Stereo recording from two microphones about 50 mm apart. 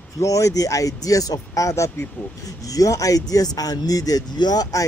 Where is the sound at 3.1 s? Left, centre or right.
Left.